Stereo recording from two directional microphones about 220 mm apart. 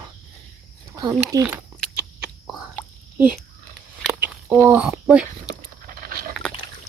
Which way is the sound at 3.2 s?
5° right (ahead or behind).